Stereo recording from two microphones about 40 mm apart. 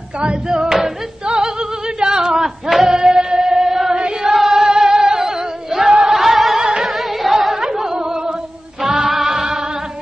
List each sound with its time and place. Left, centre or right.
0.2 s music: right
0.6 s music: centre
2.0 s a sound: centre
2.9 s music: centre
4.2 s singing: centre
6.6 s music: centre
6.9 s music: centre